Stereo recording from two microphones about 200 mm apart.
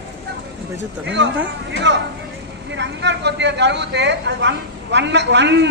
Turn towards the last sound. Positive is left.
turn(degrees=-60)  # may be behind; listen again after turning